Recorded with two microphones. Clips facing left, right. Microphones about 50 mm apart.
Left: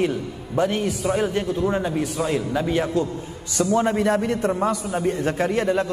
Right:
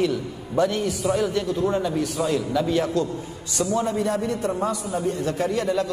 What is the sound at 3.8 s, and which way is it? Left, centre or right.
A man's voice, left.